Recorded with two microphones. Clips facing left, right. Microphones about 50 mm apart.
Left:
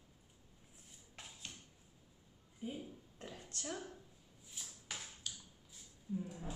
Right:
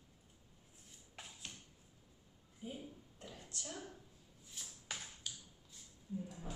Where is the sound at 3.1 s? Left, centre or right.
Left.